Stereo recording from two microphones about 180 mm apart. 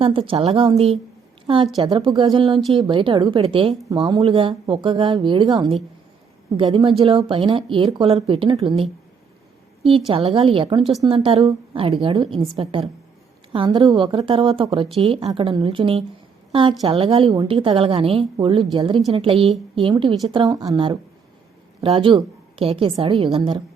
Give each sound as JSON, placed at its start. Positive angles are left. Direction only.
{"t": 0.0, "sound": "a woman's voice", "side_deg": -30}
{"t": 10.1, "sound": "a woman's voice", "side_deg": -30}